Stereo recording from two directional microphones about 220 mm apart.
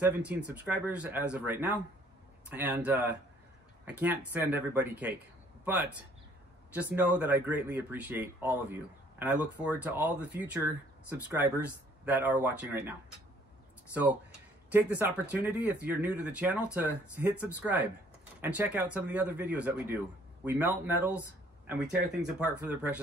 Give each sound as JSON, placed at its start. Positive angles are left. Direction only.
{"t": 0.0, "sound": "speech", "side_deg": -5}
{"t": 14.7, "sound": "speech", "side_deg": -10}